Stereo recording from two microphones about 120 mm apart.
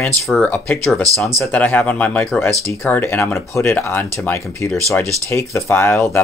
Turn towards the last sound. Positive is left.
turn(degrees=20)  # may be behind; listen again after turning